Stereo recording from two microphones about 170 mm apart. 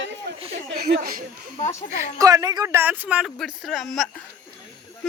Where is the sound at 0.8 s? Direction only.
70° right (ahead or behind).